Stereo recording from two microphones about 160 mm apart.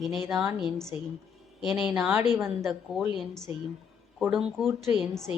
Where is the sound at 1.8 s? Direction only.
5° right (ahead or behind).